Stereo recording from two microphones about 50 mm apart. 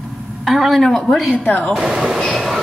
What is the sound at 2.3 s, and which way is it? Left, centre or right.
Train, centre.